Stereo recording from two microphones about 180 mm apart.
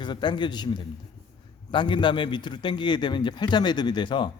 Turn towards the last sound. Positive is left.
turn(degrees=25)  # may be behind; listen again after turning